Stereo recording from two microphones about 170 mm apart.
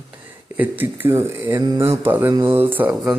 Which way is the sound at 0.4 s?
10° right (ahead or behind).